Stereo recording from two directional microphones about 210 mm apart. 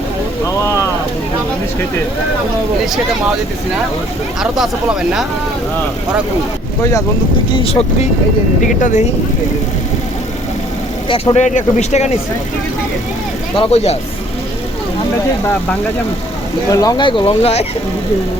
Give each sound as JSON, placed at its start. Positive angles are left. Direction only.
{"t": 4.4, "sound": "speech", "side_deg": 0}
{"t": 7.6, "sound": "speech", "side_deg": 30}
{"t": 11.1, "sound": "speech", "side_deg": 30}
{"t": 13.6, "sound": "speech", "side_deg": 30}
{"t": 16.7, "sound": "speech", "side_deg": 20}